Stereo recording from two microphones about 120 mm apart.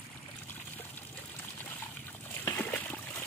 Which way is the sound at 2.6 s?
15° left (ahead or behind).